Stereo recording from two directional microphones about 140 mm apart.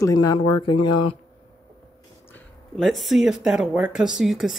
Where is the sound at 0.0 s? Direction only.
25° left (ahead or behind).